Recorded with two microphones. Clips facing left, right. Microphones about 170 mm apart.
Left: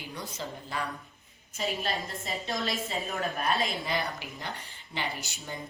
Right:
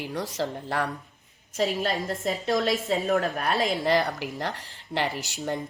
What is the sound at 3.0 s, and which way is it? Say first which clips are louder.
Speech: right 6 dB; 70° right (ahead or behind).